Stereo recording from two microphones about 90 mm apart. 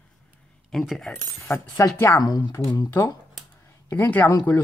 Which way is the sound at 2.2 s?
50° left (ahead or behind).